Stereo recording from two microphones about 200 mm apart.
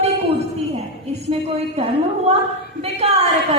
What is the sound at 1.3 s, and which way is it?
A woman's voice, 30° right (ahead or behind).